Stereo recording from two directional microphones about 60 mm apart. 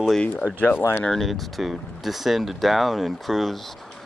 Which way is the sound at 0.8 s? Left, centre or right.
Left.